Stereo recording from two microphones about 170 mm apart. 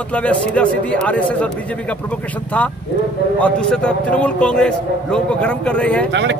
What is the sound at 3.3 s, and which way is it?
A man's voice, 5° left (ahead or behind).